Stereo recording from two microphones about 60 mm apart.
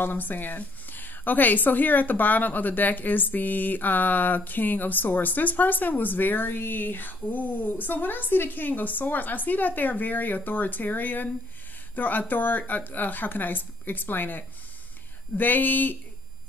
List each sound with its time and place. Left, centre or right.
0.0 s a woman's voice: left